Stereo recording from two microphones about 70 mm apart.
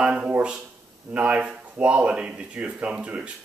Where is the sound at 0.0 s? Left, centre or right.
Centre.